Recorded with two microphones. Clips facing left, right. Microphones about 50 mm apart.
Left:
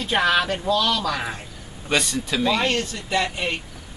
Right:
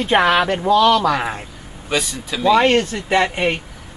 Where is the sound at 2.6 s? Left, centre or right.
Right.